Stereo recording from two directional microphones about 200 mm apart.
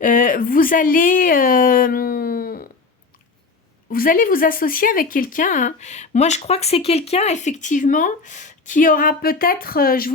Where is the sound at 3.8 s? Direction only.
45° left (ahead or behind).